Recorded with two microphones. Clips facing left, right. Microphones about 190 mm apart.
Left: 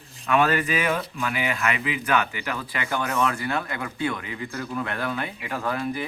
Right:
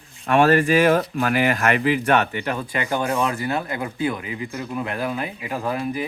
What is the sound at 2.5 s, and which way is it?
Speech, 20° right (ahead or behind).